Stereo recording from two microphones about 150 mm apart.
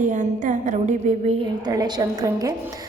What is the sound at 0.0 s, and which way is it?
A woman's voice, 55° right (ahead or behind).